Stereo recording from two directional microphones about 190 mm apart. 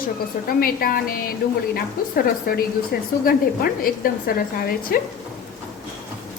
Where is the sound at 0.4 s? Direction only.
50° left (ahead or behind).